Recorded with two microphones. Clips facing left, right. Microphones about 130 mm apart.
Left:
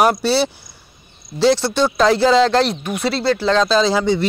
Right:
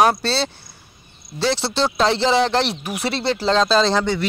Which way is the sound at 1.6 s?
30° right (ahead or behind).